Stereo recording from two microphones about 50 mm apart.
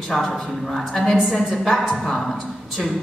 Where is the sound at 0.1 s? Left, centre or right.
Centre.